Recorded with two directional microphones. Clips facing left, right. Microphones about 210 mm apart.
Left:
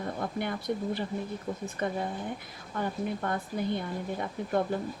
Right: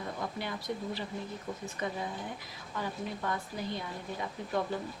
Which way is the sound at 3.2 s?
55° left (ahead or behind).